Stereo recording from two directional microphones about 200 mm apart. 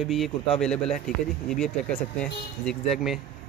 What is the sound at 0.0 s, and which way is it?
Speech, centre (ahead or behind).